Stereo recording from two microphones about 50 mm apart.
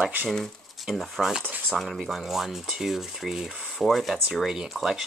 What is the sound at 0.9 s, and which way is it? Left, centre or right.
Speech, centre.